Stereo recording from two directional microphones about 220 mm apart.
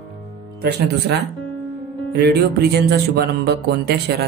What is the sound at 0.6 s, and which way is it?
Speech, 50° right (ahead or behind).